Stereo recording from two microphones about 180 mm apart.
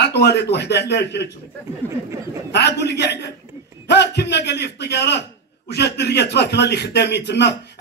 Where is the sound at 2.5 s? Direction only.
70° left (ahead or behind).